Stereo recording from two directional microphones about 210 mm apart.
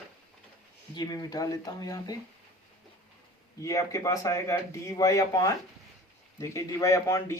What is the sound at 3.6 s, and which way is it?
Speech, 15° left (ahead or behind).